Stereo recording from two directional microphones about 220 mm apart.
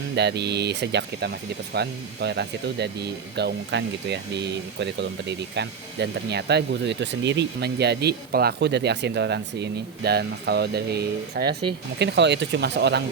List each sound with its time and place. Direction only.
0.2 s speech: 50° right (ahead or behind)